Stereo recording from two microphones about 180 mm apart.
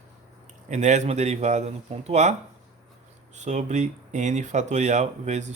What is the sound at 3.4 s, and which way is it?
Speech, 40° right (ahead or behind).